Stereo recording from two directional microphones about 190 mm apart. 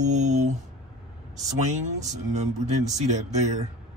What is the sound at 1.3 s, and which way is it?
Speech, 40° right (ahead or behind).